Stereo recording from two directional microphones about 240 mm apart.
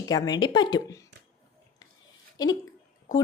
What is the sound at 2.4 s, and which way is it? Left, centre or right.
Speech, centre.